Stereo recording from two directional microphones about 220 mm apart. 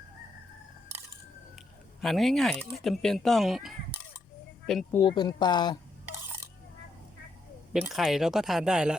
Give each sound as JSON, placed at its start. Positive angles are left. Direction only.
{"t": 2.0, "sound": "speech", "side_deg": 0}
{"t": 4.9, "sound": "speech", "side_deg": 20}
{"t": 7.7, "sound": "speech", "side_deg": -5}